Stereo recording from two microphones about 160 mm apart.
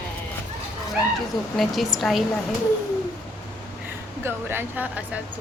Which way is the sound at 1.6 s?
Centre (ahead or behind).